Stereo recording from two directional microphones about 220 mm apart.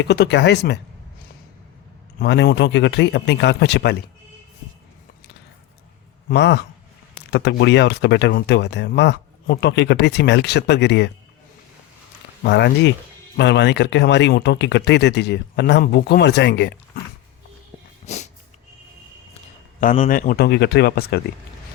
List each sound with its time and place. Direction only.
0.0 s speech: 50° left (ahead or behind)
2.1 s speech: 50° left (ahead or behind)
6.2 s a man's voice: 50° left (ahead or behind)
12.4 s speech: 50° left (ahead or behind)
18.0 s dog: 30° left (ahead or behind)
19.8 s speech: 35° left (ahead or behind)